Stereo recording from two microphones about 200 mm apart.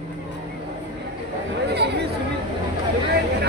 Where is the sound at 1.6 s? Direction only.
55° right (ahead or behind).